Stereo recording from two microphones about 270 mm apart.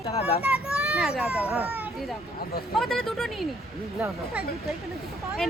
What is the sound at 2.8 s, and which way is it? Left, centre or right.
Speech, centre.